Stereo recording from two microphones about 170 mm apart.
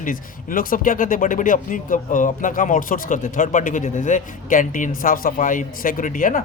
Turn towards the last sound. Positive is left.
turn(degrees=50)  # may be behind; listen again after turning